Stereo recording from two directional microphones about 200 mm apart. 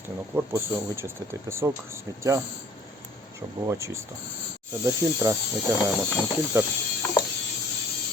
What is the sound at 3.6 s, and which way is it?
Speech, 15° right (ahead or behind).